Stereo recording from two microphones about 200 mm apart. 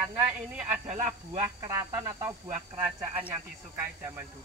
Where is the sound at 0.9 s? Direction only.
35° right (ahead or behind).